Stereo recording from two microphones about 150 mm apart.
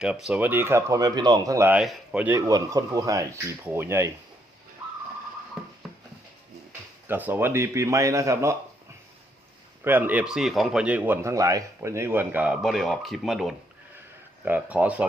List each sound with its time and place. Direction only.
0.0 s speech: 5° right (ahead or behind)
1.8 s speech: 5° right (ahead or behind)
2.3 s a man's voice: 25° right (ahead or behind)
3.6 s speech: 15° right (ahead or behind)
7.1 s a man's voice: 15° right (ahead or behind)
9.8 s speech: 10° right (ahead or behind)